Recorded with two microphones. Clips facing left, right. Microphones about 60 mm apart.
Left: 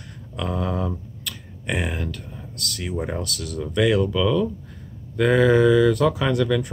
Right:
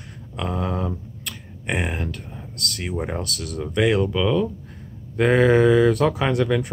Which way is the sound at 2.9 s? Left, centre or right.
Right.